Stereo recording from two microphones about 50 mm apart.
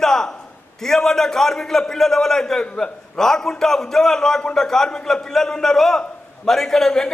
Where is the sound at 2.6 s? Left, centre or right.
Left.